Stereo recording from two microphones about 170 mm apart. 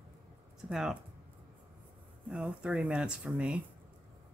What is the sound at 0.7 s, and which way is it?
Speech, 5° right (ahead or behind).